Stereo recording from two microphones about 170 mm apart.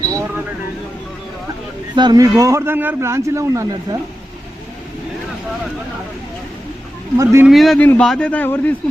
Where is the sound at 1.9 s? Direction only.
25° right (ahead or behind).